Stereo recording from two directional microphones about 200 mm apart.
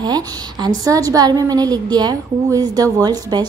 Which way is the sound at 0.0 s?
20° right (ahead or behind).